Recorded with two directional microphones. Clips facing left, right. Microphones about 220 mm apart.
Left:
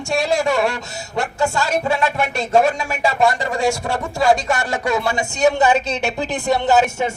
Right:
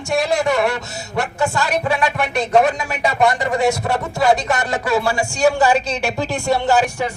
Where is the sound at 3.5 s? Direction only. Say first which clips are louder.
Right 2 dB; 20° right (ahead or behind).